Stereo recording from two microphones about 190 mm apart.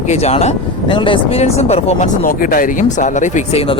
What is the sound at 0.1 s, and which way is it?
Speech, 35° left (ahead or behind).